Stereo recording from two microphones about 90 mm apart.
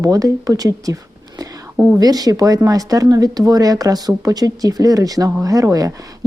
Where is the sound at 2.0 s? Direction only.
45° right (ahead or behind).